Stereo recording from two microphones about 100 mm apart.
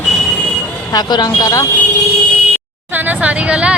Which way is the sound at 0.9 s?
45° left (ahead or behind).